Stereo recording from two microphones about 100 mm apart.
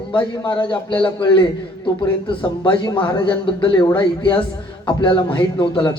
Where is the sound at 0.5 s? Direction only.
55° left (ahead or behind).